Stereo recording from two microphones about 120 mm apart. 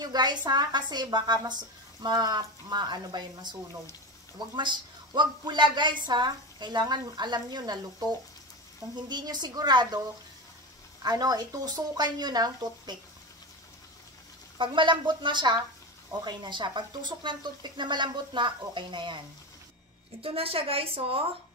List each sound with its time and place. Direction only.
0.0 s a woman's voice: 35° right (ahead or behind)
4.6 s a woman's voice: 40° right (ahead or behind)
9.1 s a woman's voice: 35° right (ahead or behind)
11.0 s a woman's voice: 35° right (ahead or behind)
14.6 s a woman's voice: 40° right (ahead or behind)